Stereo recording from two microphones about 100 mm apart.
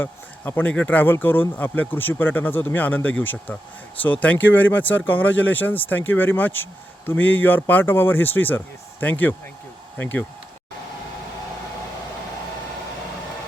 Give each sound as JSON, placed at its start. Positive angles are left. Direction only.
{"t": 0.0, "sound": "speech", "side_deg": 20}